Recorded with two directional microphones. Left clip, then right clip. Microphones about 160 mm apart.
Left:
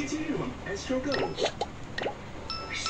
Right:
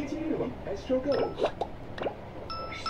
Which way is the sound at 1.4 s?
20° right (ahead or behind).